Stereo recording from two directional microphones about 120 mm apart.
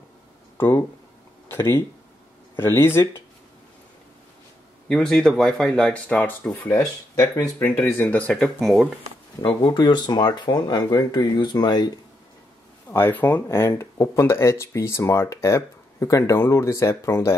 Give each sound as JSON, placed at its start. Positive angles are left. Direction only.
{"t": 0.6, "sound": "speech", "side_deg": 20}
{"t": 4.8, "sound": "a man's voice", "side_deg": 5}
{"t": 7.6, "sound": "speech", "side_deg": 15}
{"t": 9.4, "sound": "speech", "side_deg": 40}
{"t": 12.9, "sound": "speech", "side_deg": 15}